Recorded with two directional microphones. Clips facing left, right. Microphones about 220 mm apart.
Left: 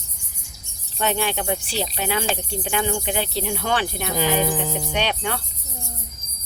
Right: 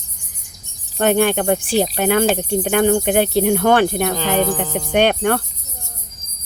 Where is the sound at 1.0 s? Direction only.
55° right (ahead or behind).